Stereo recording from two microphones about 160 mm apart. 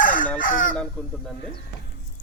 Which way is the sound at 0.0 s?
55° left (ahead or behind).